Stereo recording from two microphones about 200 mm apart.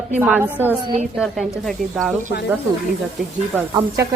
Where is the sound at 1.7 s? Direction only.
Centre (ahead or behind).